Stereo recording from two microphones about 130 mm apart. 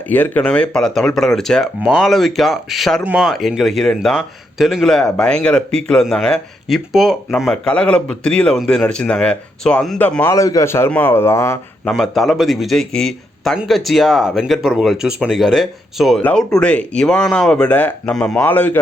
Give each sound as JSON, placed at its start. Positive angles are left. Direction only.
{"t": 0.1, "sound": "a man's voice", "side_deg": 15}
{"t": 10.2, "sound": "a man's voice", "side_deg": 25}
{"t": 11.9, "sound": "a man's voice", "side_deg": 0}